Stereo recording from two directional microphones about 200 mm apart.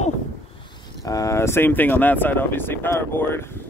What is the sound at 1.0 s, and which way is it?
Speech, 15° left (ahead or behind).